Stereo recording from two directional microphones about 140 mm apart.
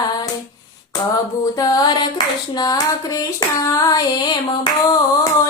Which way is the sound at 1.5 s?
30° left (ahead or behind).